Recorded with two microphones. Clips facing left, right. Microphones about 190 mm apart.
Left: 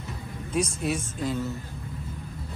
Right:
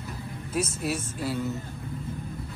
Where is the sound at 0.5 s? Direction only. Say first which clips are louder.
Left 2 dB; 5° right (ahead or behind).